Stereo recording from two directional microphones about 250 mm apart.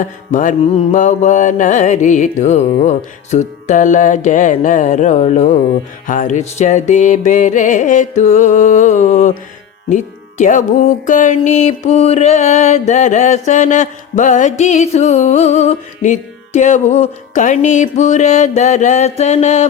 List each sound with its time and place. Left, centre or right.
0.0 s music: left
9.9 s speech: left
11.0 s music: left